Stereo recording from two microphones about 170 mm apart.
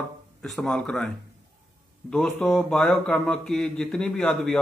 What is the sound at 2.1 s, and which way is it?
Speech, 5° left (ahead or behind).